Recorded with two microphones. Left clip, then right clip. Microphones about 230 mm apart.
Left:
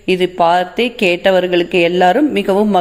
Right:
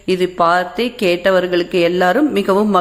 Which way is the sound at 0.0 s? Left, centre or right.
Centre.